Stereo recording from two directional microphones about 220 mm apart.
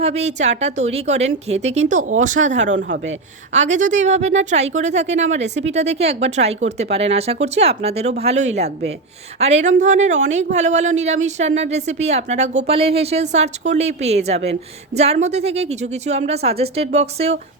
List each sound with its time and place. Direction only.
0.0 s speech: 30° right (ahead or behind)
2.7 s a woman's voice: 55° right (ahead or behind)
3.5 s a woman's voice: 30° right (ahead or behind)